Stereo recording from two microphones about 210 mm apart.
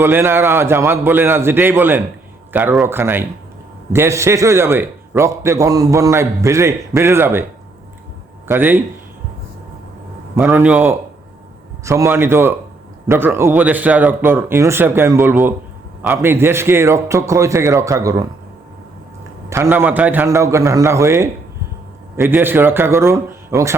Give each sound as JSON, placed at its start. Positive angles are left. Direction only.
{"t": 0.0, "sound": "a man's voice", "side_deg": -10}
{"t": 8.4, "sound": "a man's voice", "side_deg": -10}
{"t": 10.3, "sound": "a man's voice", "side_deg": -10}
{"t": 19.5, "sound": "a man's voice", "side_deg": -10}